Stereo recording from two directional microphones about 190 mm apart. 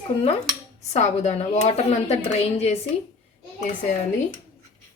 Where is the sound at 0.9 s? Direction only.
35° left (ahead or behind).